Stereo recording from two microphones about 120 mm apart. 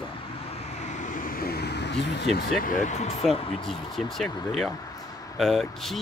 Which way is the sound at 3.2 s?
Centre (ahead or behind).